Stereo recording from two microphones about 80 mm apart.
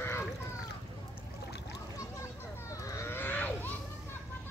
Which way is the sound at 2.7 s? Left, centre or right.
Left.